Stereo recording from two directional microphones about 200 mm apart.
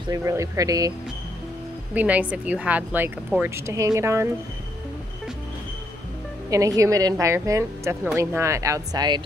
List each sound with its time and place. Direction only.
0.1 s a woman's voice: 15° right (ahead or behind)
2.0 s a woman's voice: 5° right (ahead or behind)
6.5 s a woman's voice: 15° right (ahead or behind)